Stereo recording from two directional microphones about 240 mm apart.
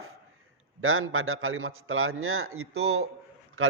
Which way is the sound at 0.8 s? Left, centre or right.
Right.